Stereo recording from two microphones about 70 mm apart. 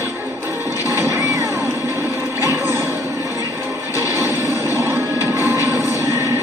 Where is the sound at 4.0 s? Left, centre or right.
Right.